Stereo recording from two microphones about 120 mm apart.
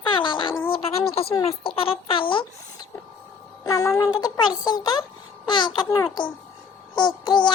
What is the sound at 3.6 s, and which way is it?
Music, 25° left (ahead or behind).